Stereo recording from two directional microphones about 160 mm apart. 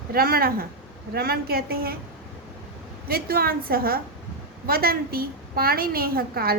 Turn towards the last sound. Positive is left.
turn(degrees=-70)  # may be behind; listen again after turning